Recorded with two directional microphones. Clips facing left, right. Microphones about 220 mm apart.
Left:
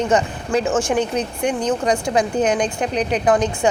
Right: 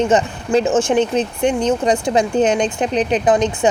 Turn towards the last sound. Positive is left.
turn(degrees=-20)  # may be behind; listen again after turning